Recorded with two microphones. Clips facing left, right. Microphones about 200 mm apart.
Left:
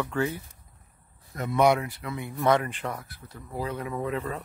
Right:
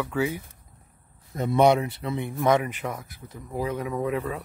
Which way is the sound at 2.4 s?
15° right (ahead or behind).